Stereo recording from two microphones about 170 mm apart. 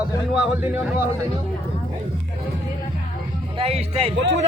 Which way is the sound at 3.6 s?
35° right (ahead or behind).